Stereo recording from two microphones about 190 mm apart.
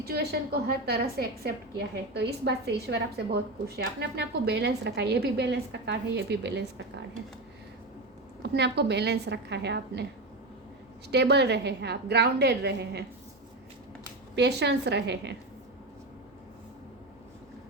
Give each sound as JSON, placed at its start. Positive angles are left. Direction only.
{"t": 0.0, "sound": "a woman's voice", "side_deg": -55}
{"t": 8.4, "sound": "a woman's voice", "side_deg": -65}
{"t": 11.1, "sound": "a woman's voice", "side_deg": -60}
{"t": 14.3, "sound": "a woman's voice", "side_deg": -60}